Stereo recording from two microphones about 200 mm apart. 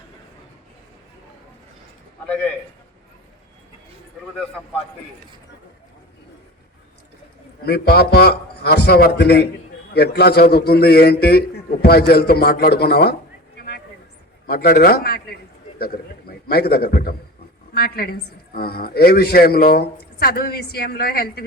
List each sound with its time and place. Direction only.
7.6 s a woman's voice: 50° left (ahead or behind)
13.6 s a sound: 50° left (ahead or behind)
14.4 s a woman's voice: 50° left (ahead or behind)